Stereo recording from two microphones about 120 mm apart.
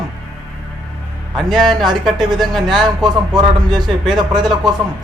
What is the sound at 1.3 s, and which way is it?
Speech, centre (ahead or behind).